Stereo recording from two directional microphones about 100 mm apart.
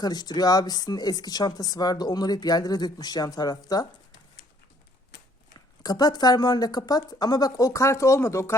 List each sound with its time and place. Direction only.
0.0 s speech: 40° left (ahead or behind)
5.5 s speech: 40° left (ahead or behind)